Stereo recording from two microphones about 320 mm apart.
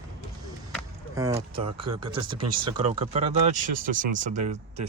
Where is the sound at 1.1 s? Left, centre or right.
Centre.